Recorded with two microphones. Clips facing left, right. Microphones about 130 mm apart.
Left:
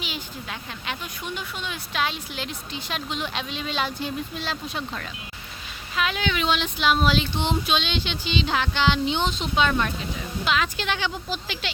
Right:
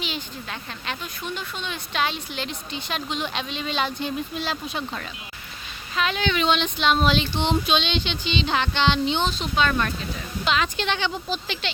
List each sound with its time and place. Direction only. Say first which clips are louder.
0.9 s a woman's voice: right 1 dB; 15° left (ahead or behind)
9.3 s speech: even; 20° left (ahead or behind)
10.4 s a woman's voice: right 1 dB; 5° left (ahead or behind)